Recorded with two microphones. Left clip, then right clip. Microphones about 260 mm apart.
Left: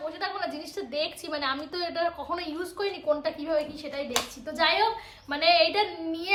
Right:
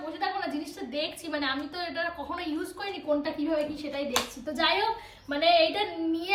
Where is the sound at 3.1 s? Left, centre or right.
Left.